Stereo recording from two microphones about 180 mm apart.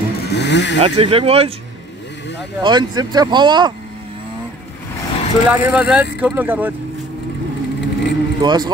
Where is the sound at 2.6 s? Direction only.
25° right (ahead or behind).